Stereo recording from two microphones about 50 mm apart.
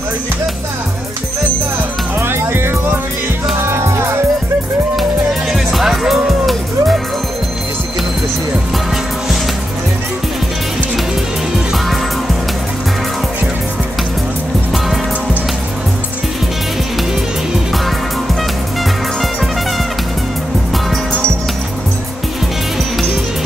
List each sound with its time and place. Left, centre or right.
2.1 s music: right
5.5 s music: centre